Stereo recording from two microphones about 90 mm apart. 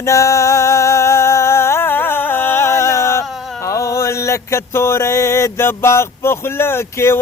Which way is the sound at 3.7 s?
35° left (ahead or behind).